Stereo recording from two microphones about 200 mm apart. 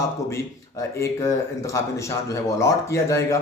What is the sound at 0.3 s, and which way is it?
Speech, 15° left (ahead or behind).